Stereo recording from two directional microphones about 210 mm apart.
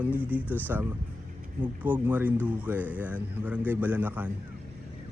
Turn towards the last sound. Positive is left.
turn(degrees=-10)  # may be behind; listen again after turning